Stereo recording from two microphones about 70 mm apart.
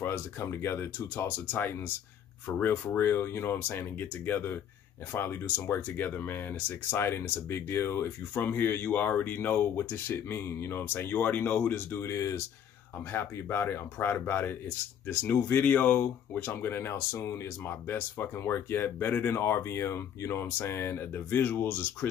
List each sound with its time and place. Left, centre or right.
0.0 s speech: left
12.1 s speech: left